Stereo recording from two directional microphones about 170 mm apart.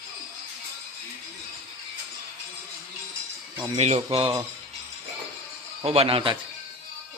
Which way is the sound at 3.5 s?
25° right (ahead or behind).